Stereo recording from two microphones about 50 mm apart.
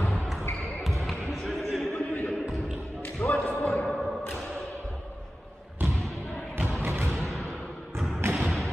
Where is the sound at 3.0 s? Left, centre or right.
Left.